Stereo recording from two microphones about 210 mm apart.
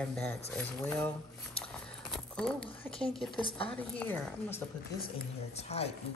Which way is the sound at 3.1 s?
Centre (ahead or behind).